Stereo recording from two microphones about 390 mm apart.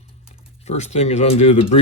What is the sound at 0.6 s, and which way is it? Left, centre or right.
Speech, centre.